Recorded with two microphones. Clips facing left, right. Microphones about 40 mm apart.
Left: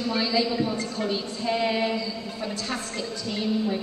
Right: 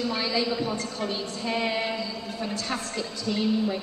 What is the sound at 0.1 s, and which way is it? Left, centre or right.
Speech, centre.